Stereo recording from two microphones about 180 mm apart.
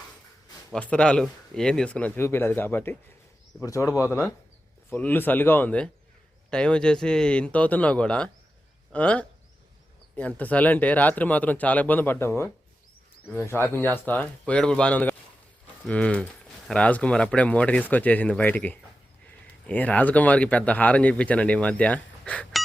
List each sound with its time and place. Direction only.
0.7 s speech: 5° left (ahead or behind)